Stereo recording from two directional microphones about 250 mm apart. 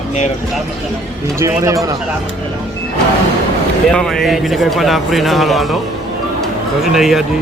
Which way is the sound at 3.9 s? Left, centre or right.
Centre.